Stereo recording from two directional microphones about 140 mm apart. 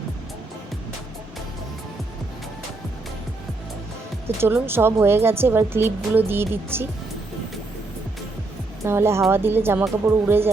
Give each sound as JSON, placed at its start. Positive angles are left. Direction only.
{"t": 4.4, "sound": "a woman's voice", "side_deg": -15}
{"t": 8.8, "sound": "a woman's voice", "side_deg": -20}